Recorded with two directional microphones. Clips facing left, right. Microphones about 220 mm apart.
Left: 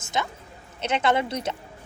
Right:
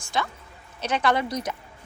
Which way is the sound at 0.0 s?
20° left (ahead or behind).